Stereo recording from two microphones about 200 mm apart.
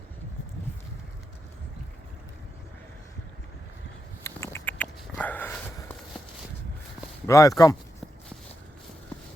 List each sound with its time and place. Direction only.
4.2 s dog: 15° left (ahead or behind)
7.3 s speech: 15° left (ahead or behind)